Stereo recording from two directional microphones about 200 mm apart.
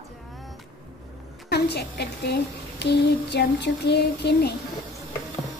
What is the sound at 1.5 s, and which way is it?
Speech, 55° left (ahead or behind).